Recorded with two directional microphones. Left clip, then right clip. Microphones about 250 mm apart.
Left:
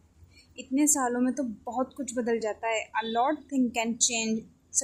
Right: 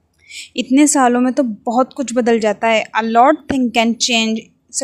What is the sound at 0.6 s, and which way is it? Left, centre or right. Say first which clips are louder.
A woman's voice: right 14 dB; right.